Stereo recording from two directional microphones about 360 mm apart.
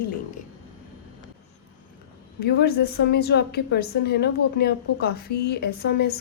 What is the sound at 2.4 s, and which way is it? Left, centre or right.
A woman's voice, left.